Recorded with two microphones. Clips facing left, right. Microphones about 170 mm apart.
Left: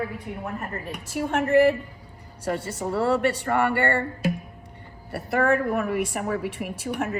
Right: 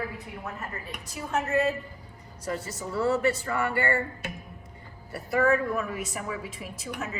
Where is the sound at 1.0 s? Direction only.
75° left (ahead or behind).